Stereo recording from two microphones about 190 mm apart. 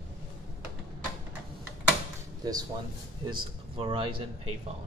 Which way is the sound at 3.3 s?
30° right (ahead or behind).